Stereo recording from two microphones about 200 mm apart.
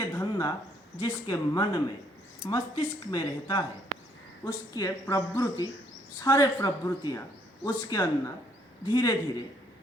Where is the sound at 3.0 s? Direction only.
20° left (ahead or behind).